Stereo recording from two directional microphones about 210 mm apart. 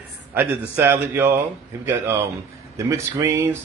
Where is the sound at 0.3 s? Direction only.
10° right (ahead or behind).